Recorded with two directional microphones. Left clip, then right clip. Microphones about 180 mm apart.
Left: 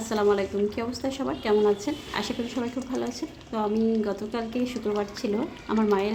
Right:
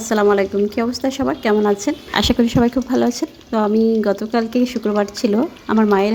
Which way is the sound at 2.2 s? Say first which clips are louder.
Right 14 dB; 45° right (ahead or behind).